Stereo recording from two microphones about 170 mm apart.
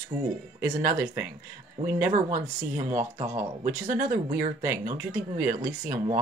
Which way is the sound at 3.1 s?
20° right (ahead or behind).